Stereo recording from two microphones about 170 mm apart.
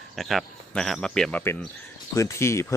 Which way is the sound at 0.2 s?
Centre (ahead or behind).